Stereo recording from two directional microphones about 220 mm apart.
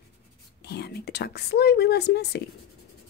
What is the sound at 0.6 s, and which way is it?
Speech, 50° left (ahead or behind).